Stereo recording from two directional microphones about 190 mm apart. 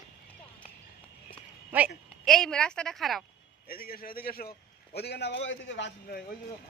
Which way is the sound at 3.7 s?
50° left (ahead or behind).